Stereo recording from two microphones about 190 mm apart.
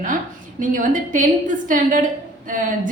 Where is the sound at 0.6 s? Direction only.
45° right (ahead or behind).